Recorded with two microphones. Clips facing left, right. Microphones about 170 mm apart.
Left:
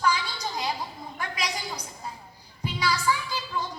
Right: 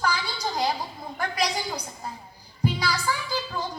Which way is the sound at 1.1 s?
35° right (ahead or behind).